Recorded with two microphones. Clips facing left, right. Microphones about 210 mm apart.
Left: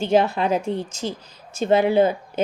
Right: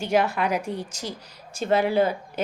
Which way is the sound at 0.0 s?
25° left (ahead or behind).